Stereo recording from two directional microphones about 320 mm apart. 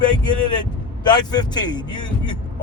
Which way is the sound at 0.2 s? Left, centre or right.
Centre.